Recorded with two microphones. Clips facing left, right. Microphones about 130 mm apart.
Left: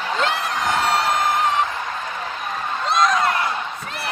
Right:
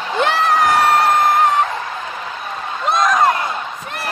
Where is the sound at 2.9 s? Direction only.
50° right (ahead or behind).